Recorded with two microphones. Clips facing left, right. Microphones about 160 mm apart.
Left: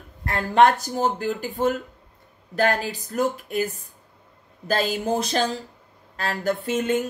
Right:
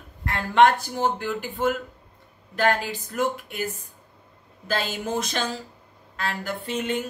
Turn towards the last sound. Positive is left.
turn(degrees=45)  # may be behind; listen again after turning